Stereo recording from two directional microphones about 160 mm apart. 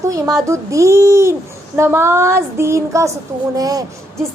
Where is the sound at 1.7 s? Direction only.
15° right (ahead or behind).